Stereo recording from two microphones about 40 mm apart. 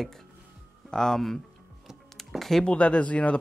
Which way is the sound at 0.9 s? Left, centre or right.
Centre.